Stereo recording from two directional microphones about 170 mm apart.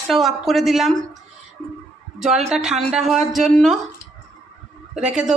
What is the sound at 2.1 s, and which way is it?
Speech, 5° right (ahead or behind).